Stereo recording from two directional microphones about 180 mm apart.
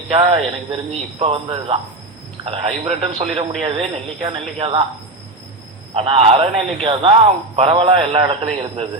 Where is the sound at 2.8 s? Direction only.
35° right (ahead or behind).